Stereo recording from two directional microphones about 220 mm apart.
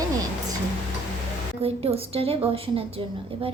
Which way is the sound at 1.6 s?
25° right (ahead or behind).